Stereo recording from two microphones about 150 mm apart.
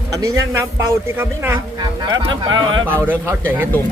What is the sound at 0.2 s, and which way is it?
A man's voice, 20° right (ahead or behind).